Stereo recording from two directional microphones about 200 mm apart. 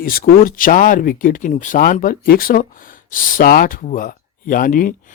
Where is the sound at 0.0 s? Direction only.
45° left (ahead or behind).